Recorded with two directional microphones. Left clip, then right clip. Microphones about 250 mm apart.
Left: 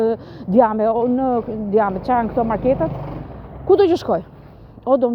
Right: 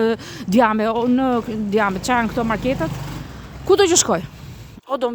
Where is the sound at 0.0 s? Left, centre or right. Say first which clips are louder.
Even; right.